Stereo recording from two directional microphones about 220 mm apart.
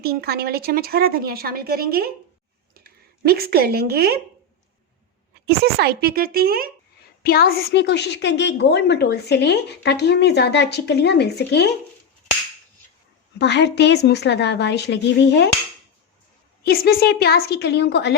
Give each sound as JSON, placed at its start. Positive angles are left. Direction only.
{"t": 0.0, "sound": "speech", "side_deg": -45}
{"t": 5.5, "sound": "speech", "side_deg": -45}
{"t": 7.2, "sound": "a woman's voice", "side_deg": 45}
{"t": 13.4, "sound": "a woman's voice", "side_deg": 50}
{"t": 16.6, "sound": "a woman's voice", "side_deg": 45}